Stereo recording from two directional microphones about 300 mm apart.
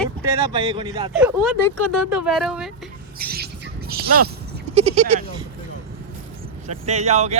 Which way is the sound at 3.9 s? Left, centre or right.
Right.